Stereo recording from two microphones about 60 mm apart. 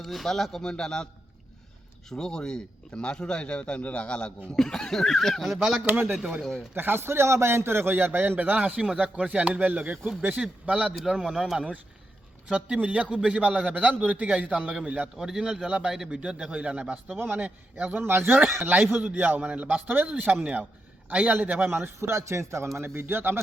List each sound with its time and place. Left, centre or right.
0.0 s a man's voice: centre
2.0 s a man's voice: centre
5.8 s a man's voice: right
10.4 s a man's voice: centre
12.6 s a man's voice: right
15.1 s a man's voice: centre
17.2 s a man's voice: right
21.7 s speech: right